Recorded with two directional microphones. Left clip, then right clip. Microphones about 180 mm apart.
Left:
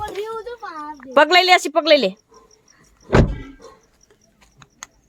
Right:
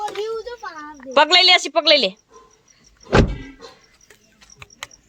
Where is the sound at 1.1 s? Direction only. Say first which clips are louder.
Even; 35° left (ahead or behind).